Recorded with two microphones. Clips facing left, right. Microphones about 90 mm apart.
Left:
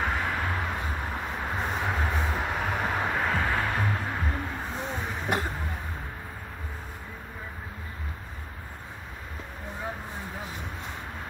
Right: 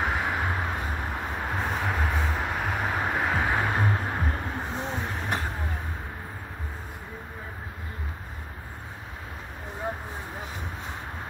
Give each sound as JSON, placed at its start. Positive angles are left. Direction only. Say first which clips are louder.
{"t": 0.0, "sound": "vehicle", "louder": "right 1 dB", "side_deg": -10}
{"t": 1.5, "sound": "vehicle", "louder": "right 1 dB", "side_deg": 0}
{"t": 5.0, "sound": "vehicle", "louder": "right 1 dB", "side_deg": 0}